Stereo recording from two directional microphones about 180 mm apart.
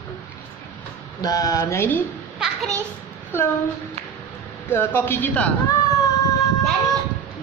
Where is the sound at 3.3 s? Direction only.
10° left (ahead or behind).